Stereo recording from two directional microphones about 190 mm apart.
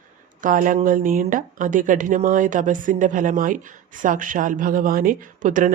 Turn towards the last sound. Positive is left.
turn(degrees=-45)  # may be behind; listen again after turning